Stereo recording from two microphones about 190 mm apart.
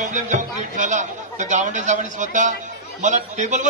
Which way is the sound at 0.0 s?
40° right (ahead or behind).